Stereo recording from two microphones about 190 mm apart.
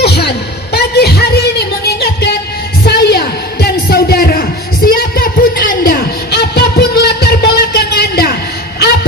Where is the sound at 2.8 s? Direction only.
60° left (ahead or behind).